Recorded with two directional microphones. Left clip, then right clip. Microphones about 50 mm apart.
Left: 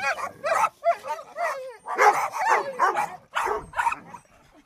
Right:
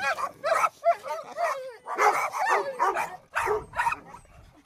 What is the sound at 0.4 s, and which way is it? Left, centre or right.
Dog, left.